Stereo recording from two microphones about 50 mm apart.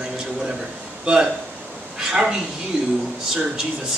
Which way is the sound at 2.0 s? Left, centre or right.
Centre.